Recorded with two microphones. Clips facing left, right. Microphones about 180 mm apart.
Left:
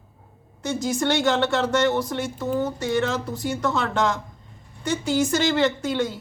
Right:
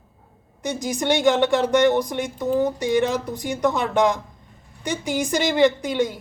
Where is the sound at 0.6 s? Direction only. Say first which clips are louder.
Left 1 dB; 15° right (ahead or behind).